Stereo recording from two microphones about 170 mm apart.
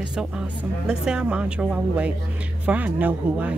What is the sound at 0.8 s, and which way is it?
Speech, 5° right (ahead or behind).